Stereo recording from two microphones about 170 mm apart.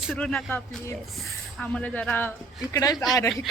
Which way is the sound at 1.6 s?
5° left (ahead or behind).